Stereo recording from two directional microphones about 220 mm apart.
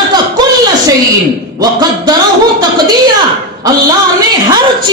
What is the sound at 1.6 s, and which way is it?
Music, 15° right (ahead or behind).